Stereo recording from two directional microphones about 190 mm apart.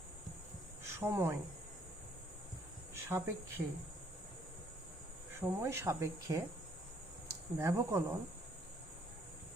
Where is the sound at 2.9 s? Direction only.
15° right (ahead or behind).